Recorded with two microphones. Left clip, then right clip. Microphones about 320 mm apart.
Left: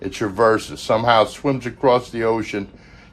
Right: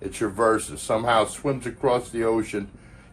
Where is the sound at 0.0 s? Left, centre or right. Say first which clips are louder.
Left 5 dB; left.